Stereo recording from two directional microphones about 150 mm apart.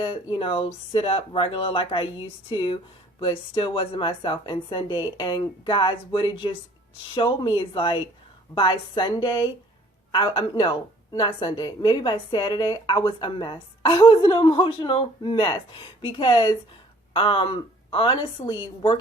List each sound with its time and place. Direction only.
0.0 s a woman's voice: 35° left (ahead or behind)